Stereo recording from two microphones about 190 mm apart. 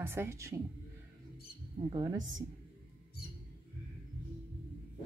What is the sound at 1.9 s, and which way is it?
Speech, 20° right (ahead or behind).